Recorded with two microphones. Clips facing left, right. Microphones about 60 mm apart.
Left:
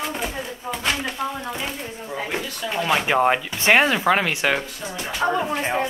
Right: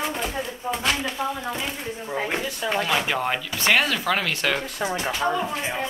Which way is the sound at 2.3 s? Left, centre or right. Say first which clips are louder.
Right 1 dB; right.